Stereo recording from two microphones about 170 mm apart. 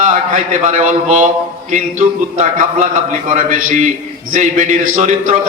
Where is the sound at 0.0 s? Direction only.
45° right (ahead or behind).